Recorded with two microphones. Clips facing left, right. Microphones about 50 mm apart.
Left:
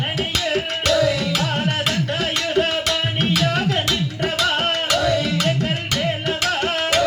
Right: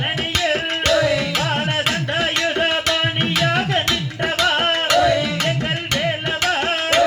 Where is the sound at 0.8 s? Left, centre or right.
Centre.